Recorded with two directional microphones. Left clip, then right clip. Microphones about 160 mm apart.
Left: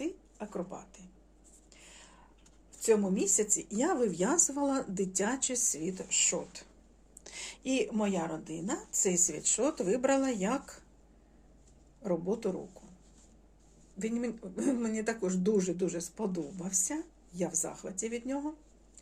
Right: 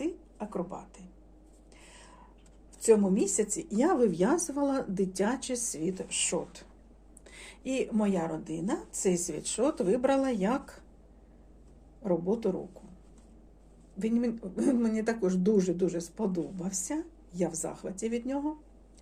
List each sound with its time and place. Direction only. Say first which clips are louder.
0.0 s a sound: right 3 dB; centre (ahead or behind)
1.7 s writing: right 1 dB; centre (ahead or behind)
2.7 s speech: right 4 dB; centre (ahead or behind)
7.3 s a sound: left 3 dB; 35° left (ahead or behind)
7.7 s speech: right 1 dB; 20° left (ahead or behind)
12.0 s speech: right 3 dB; 10° left (ahead or behind)
14.0 s speech: right 4 dB; 5° left (ahead or behind)